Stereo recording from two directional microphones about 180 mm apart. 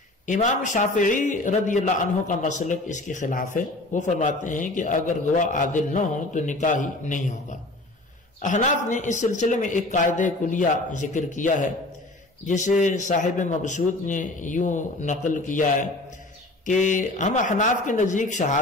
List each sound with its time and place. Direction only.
0.3 s a man's voice: 45° left (ahead or behind)
8.4 s a man's voice: 45° left (ahead or behind)